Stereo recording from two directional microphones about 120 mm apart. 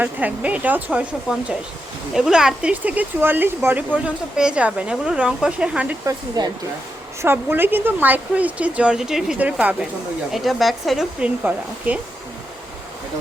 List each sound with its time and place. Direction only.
0.0 s speech: 15° right (ahead or behind)
6.1 s speech: 35° right (ahead or behind)
7.2 s speech: 20° right (ahead or behind)
10.3 s speech: centre (ahead or behind)
11.5 s speech: 20° right (ahead or behind)